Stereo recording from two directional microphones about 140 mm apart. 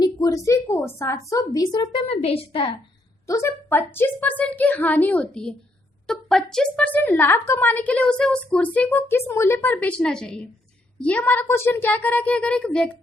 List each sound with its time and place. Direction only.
0.0 s a woman's voice: 25° left (ahead or behind); by 2.7 s 40° left (ahead or behind)
3.2 s a woman's voice: 20° left (ahead or behind); by 12.9 s 5° left (ahead or behind)